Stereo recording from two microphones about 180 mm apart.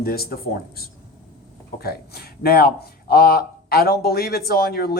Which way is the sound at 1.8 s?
60° left (ahead or behind).